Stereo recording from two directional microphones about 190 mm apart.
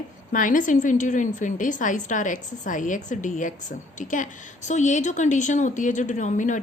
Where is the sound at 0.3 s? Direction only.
45° left (ahead or behind).